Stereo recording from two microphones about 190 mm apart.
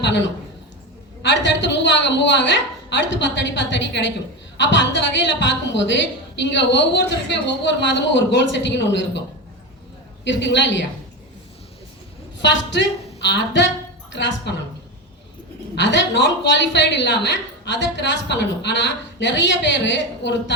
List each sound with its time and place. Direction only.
0.0 s a sound: 70° left (ahead or behind)
1.2 s a woman's voice: 70° left (ahead or behind)
10.2 s a woman's voice: 70° left (ahead or behind)
12.4 s a woman's voice: 70° left (ahead or behind)
15.7 s a woman's voice: 70° left (ahead or behind)